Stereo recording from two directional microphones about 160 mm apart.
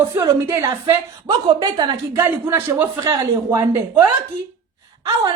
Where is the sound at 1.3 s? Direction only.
30° right (ahead or behind).